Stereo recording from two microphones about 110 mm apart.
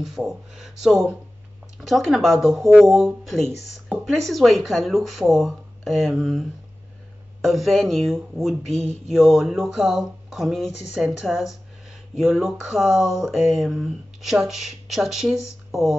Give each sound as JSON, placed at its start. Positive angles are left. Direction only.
{"t": 0.0, "sound": "speech", "side_deg": 0}
{"t": 7.4, "sound": "speech", "side_deg": 0}